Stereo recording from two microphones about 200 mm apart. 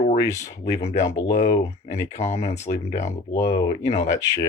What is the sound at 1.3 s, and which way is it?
Speech, 35° left (ahead or behind).